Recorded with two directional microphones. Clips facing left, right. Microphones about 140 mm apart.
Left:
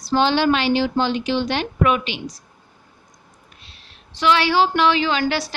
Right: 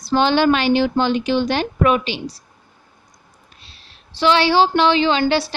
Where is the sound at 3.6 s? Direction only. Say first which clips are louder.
Even; 30° right (ahead or behind).